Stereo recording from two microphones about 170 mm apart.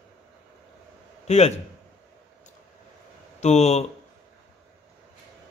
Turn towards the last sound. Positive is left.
turn(degrees=40)  # may be behind; listen again after turning